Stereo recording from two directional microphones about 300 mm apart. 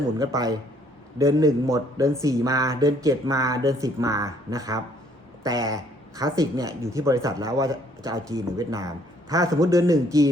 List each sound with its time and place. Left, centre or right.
0.2 s a man's voice: centre